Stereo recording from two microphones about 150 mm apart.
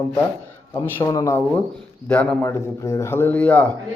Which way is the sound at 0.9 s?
20° left (ahead or behind).